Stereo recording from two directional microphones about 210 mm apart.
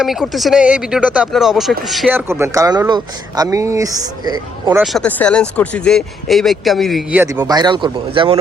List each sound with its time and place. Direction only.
0.0 s speech: centre (ahead or behind); by 4.8 s 20° right (ahead or behind)
4.8 s speech: centre (ahead or behind); by 8.4 s 25° right (ahead or behind)